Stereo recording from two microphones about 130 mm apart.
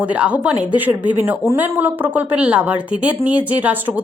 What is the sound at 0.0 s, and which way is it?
Speech, 10° right (ahead or behind).